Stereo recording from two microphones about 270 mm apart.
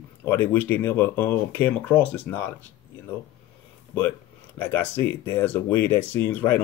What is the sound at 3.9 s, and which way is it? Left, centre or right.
Speech, centre.